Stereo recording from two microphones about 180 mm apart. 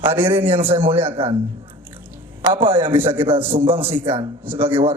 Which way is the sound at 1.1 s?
30° right (ahead or behind).